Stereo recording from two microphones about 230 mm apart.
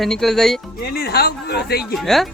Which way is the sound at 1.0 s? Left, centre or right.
Left.